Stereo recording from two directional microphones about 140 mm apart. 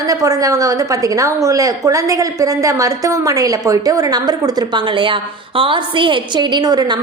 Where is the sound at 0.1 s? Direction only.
25° right (ahead or behind).